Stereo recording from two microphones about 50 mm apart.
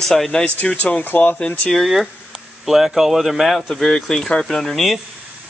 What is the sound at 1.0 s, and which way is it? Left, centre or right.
Speech, left.